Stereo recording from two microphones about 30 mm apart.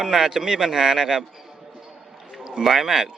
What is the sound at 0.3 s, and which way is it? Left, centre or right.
Speech, right.